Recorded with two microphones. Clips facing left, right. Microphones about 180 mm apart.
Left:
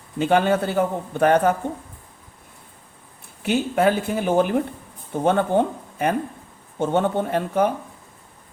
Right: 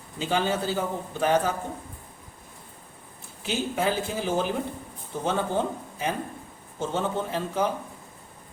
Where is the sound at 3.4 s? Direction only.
60° left (ahead or behind).